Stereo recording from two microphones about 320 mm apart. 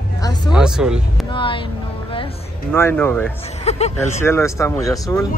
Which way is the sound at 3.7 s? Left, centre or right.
Centre.